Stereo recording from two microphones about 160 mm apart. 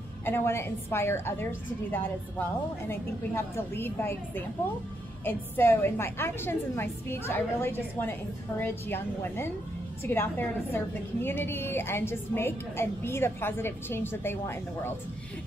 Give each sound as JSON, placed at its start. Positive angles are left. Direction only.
{"t": 0.2, "sound": "a woman's voice", "side_deg": 15}